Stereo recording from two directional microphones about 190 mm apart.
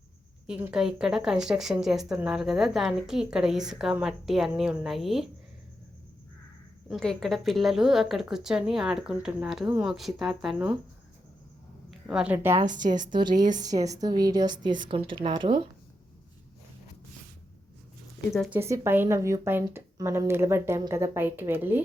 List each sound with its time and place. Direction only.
0.4 s speech: 5° right (ahead or behind)
6.8 s speech: centre (ahead or behind)
11.9 s a woman's voice: 5° right (ahead or behind)
13.1 s a woman's voice: 25° right (ahead or behind)
18.5 s a woman's voice: 15° right (ahead or behind)